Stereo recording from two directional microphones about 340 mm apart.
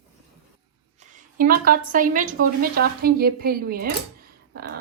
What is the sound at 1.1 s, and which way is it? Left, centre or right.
A woman's voice, right.